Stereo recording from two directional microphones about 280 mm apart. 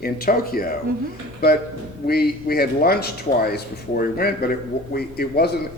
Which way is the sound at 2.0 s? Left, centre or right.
Left.